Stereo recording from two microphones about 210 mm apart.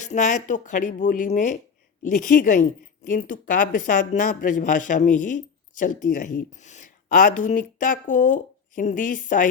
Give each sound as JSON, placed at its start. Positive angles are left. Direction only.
{"t": 0.1, "sound": "a woman's voice", "side_deg": 35}